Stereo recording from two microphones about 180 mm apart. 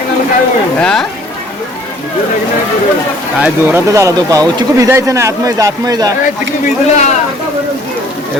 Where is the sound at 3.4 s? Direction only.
15° right (ahead or behind).